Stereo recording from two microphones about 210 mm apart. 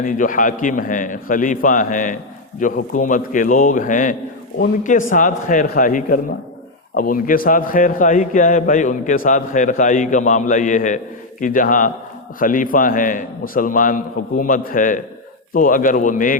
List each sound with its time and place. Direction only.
0.0 s a man's voice: 40° left (ahead or behind)